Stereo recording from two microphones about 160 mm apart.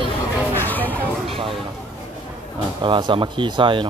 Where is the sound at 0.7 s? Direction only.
10° left (ahead or behind).